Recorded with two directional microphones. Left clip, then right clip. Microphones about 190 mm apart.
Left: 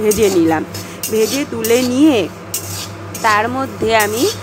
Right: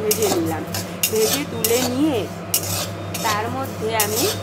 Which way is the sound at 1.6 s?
30° left (ahead or behind).